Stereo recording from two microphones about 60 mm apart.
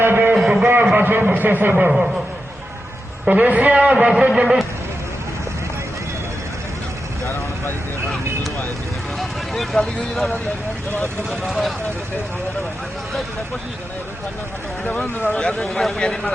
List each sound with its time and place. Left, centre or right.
0.0 s a sound: right
0.3 s a sound: centre
0.9 s a sound: right
1.3 s speech: right
1.7 s speech: centre
3.2 s a woman's voice: right
7.3 s vehicle: left
9.1 s speech: centre
15.3 s speech: centre